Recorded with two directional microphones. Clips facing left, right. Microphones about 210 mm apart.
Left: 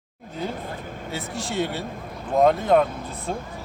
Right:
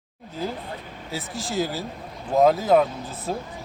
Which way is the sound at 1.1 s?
Centre (ahead or behind).